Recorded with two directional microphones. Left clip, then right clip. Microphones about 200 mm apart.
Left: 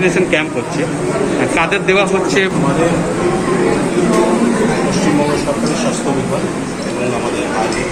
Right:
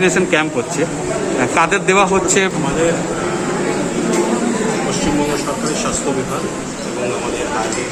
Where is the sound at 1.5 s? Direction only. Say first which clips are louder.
Right 1 dB; 45° right (ahead or behind).